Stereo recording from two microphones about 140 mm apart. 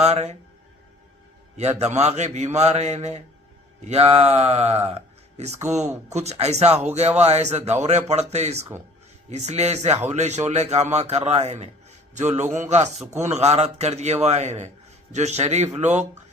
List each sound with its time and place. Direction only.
0.0 s a man's voice: 50° right (ahead or behind)
1.8 s speech: 50° right (ahead or behind)